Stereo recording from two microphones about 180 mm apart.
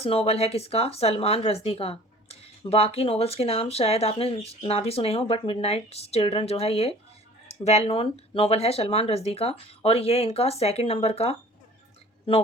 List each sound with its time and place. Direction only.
0.0 s speech: 35° left (ahead or behind)